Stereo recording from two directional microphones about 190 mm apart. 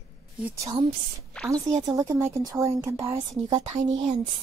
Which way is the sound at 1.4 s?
5° left (ahead or behind).